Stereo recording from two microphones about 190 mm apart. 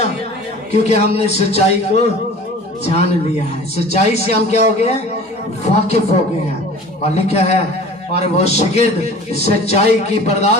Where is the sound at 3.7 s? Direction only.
35° left (ahead or behind).